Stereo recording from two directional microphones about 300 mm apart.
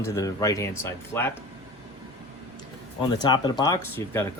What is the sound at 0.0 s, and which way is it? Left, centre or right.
Speech, centre.